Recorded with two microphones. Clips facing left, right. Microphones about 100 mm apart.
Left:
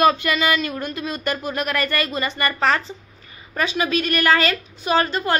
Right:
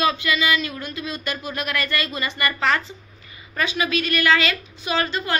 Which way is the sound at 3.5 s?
35° left (ahead or behind).